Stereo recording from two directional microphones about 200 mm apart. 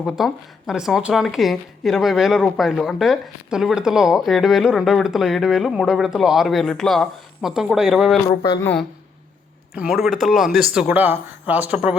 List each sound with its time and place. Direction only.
0.2 s speech: centre (ahead or behind)
8.3 s speech: 25° left (ahead or behind)
8.6 s speech: 5° left (ahead or behind)